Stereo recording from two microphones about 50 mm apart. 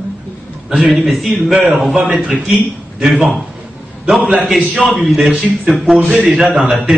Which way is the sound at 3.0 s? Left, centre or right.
Centre.